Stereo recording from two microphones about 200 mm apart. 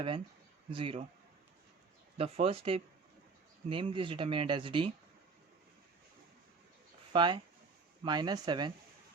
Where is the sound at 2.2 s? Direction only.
30° right (ahead or behind).